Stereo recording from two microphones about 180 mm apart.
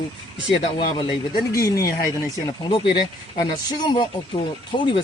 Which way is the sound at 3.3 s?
25° left (ahead or behind).